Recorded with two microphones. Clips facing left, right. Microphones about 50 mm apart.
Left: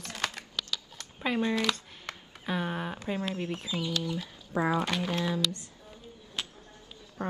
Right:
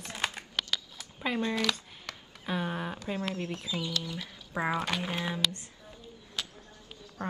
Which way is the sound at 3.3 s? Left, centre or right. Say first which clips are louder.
Left 2 dB; left.